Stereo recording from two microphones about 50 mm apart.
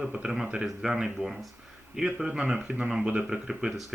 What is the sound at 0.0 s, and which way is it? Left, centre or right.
Speech, centre.